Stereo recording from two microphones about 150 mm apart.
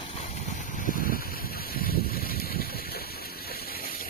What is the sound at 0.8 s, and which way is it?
Vehicle, 65° left (ahead or behind).